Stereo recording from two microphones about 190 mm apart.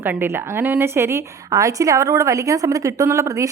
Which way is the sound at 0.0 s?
10° right (ahead or behind).